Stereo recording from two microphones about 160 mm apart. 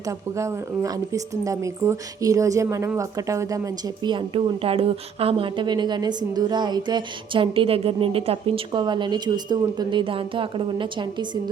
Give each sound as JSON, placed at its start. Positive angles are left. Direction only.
{"t": 0.0, "sound": "speech", "side_deg": -20}